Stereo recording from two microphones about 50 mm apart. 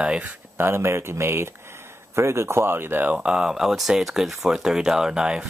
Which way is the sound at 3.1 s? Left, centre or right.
Centre.